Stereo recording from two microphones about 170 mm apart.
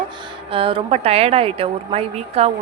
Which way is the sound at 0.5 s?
30° right (ahead or behind).